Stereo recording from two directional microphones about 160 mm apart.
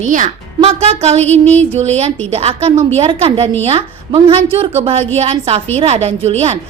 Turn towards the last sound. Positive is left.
turn(degrees=-40)  # may be behind; listen again after turning